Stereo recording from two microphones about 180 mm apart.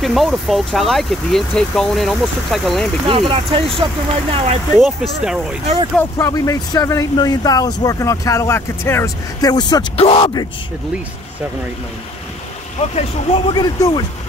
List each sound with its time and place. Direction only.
0.0 s speech: centre (ahead or behind)
3.1 s speech: 30° right (ahead or behind)
4.7 s speech: centre (ahead or behind)
5.9 s speech: 15° left (ahead or behind)
12.9 s speech: 30° left (ahead or behind)